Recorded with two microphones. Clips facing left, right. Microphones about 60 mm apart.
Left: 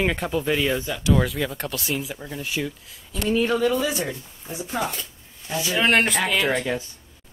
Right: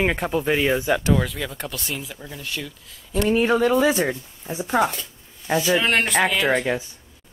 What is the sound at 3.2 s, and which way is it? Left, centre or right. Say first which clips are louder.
Speech: right 2 dB; right.